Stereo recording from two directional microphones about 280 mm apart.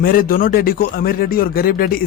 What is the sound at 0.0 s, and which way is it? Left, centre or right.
Speech, left.